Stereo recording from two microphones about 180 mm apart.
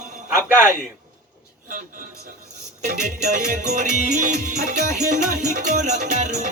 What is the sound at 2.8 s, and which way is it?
Music, 45° right (ahead or behind).